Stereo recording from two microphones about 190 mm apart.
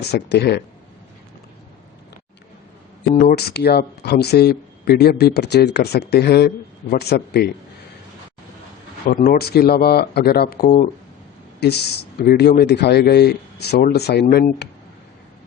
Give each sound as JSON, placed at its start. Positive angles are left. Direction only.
{"t": 0.0, "sound": "speech", "side_deg": 60}
{"t": 3.2, "sound": "speech", "side_deg": 55}
{"t": 9.0, "sound": "speech", "side_deg": 45}